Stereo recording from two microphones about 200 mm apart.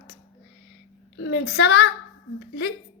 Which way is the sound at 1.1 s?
70° left (ahead or behind).